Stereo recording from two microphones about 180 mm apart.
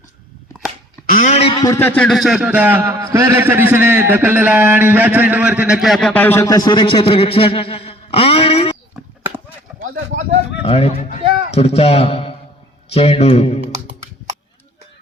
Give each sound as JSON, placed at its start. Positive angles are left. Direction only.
{"t": 1.1, "sound": "speech", "side_deg": 40}
{"t": 1.5, "sound": "a man's voice", "side_deg": 20}
{"t": 10.6, "sound": "speech", "side_deg": 35}